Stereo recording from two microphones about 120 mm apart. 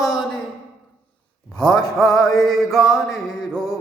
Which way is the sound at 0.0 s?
Centre (ahead or behind).